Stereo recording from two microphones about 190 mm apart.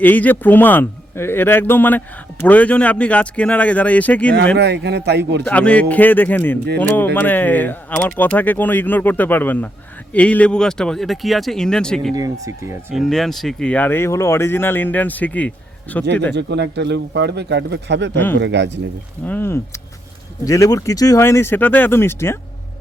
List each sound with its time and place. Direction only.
0.0 s speech: 10° left (ahead or behind)
4.5 s speech: 65° right (ahead or behind)
5.5 s speech: 5° left (ahead or behind)
12.1 s speech: 20° right (ahead or behind)
12.9 s speech: centre (ahead or behind)
16.3 s speech: 65° right (ahead or behind)
19.2 s speech: 10° left (ahead or behind)